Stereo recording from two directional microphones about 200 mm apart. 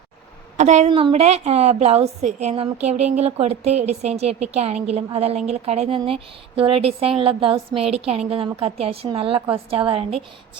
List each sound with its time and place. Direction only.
0.5 s a woman's voice: 35° right (ahead or behind)